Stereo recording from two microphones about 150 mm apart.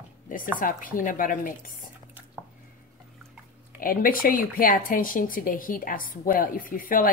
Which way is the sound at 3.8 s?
70° left (ahead or behind).